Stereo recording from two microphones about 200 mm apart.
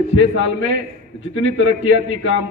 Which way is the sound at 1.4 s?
85° left.